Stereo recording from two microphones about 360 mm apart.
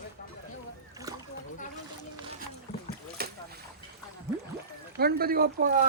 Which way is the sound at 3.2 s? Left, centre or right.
Right.